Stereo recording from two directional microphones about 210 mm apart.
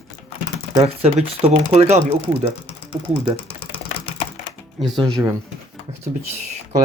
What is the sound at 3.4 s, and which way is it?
Typing, 25° left (ahead or behind).